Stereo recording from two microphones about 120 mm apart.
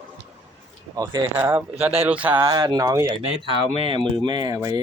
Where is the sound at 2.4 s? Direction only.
30° right (ahead or behind).